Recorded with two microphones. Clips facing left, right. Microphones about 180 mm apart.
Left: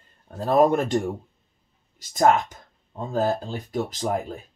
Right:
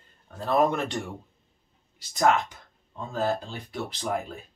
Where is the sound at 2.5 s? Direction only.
45° left (ahead or behind).